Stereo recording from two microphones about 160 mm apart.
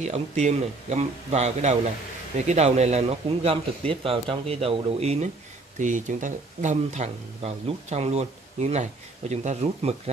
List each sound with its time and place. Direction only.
0.0 s speech: 45° right (ahead or behind)
5.8 s speech: 50° right (ahead or behind)